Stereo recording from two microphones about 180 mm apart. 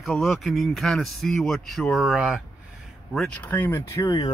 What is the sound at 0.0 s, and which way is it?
A man's voice, centre (ahead or behind).